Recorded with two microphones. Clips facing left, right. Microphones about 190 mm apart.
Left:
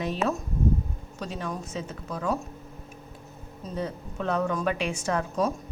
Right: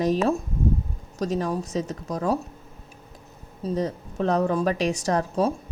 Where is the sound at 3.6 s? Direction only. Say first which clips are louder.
Right 6 dB; 35° right (ahead or behind).